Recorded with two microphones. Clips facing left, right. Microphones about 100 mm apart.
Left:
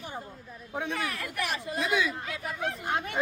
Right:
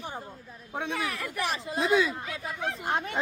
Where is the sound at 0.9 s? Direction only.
15° right (ahead or behind).